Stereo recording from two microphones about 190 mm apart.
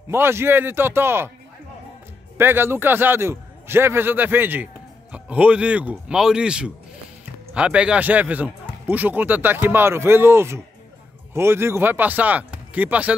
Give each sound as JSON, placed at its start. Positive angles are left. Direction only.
{"t": 0.1, "sound": "a man's voice", "side_deg": -15}
{"t": 2.3, "sound": "a man's voice", "side_deg": -10}